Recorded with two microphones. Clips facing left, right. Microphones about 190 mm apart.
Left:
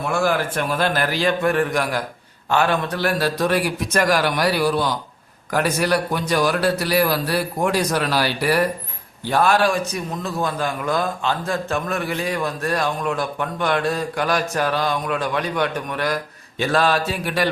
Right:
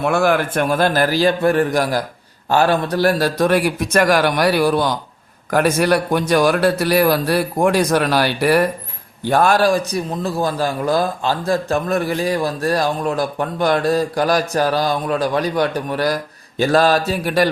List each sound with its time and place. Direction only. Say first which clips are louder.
0.0 s a man's voice: right 4 dB; 65° right (ahead or behind); by 17.5 s 40° right (ahead or behind)